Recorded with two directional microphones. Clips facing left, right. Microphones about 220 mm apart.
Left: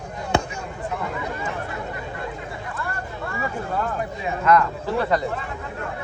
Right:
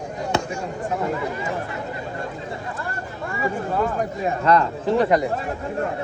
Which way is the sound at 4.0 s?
40° right (ahead or behind).